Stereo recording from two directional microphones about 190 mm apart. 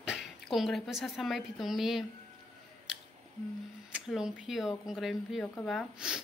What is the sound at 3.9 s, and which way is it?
Speech, 5° right (ahead or behind).